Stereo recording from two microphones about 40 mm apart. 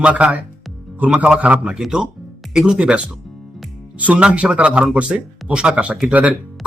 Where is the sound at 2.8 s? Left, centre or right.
Right.